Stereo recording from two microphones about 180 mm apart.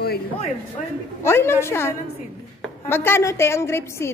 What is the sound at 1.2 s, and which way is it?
Speech, 15° left (ahead or behind).